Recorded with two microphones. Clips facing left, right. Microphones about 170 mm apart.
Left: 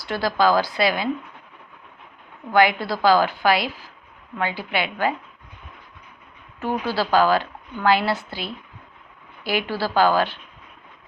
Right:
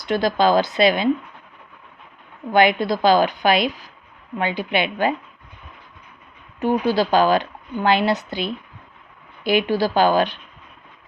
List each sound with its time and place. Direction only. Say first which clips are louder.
0.0 s a woman's voice: right 2 dB; 20° right (ahead or behind)
2.5 s a woman's voice: right 2 dB; 20° right (ahead or behind)
6.6 s a woman's voice: right 5 dB; 15° right (ahead or behind)